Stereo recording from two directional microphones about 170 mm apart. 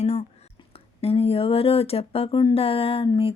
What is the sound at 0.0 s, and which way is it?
Whispering, 40° left (ahead or behind).